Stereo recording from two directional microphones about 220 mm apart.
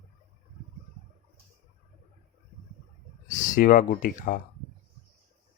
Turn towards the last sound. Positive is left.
turn(degrees=35)  # may be behind; listen again after turning